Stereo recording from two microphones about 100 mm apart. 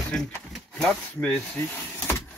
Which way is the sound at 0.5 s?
Centre (ahead or behind).